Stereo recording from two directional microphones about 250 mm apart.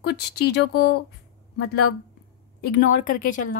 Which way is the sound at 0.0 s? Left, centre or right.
Left.